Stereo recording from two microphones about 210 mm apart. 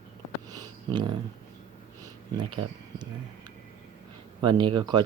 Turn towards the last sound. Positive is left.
turn(degrees=-20)  # may be behind; listen again after turning